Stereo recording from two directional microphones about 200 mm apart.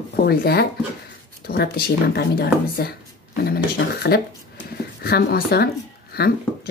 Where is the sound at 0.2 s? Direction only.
50° left (ahead or behind).